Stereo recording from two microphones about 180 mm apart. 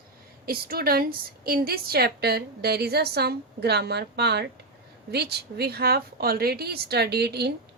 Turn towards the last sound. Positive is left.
turn(degrees=-65)  # may be behind; listen again after turning